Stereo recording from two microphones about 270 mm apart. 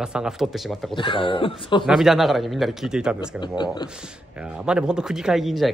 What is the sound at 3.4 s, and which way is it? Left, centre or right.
Speech, centre.